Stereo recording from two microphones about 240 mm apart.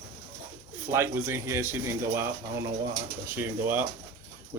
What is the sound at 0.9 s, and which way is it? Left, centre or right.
Speech, centre.